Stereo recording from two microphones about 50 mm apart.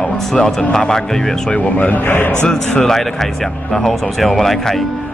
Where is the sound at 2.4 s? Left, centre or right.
Centre.